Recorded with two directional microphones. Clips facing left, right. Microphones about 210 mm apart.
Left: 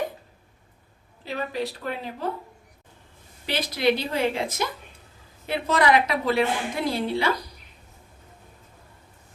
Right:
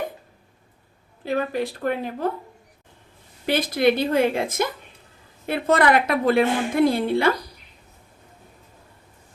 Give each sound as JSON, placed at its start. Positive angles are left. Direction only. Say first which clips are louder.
{"t": 1.2, "sound": "a woman's voice", "louder": "right 5 dB", "side_deg": -50}
{"t": 3.4, "sound": "a woman's voice", "louder": "right 4 dB", "side_deg": -50}